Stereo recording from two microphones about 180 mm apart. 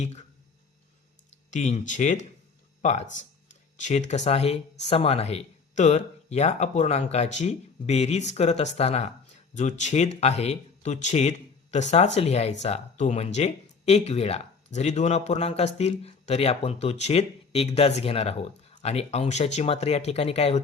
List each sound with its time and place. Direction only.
0.0 s speech: 40° left (ahead or behind)
1.5 s speech: 45° left (ahead or behind)